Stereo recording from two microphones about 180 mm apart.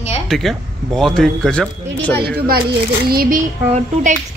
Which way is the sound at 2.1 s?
60° right (ahead or behind).